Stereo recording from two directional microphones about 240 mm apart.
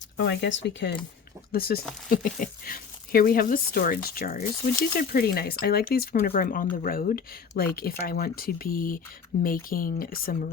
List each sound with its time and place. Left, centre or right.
0.3 s speech: left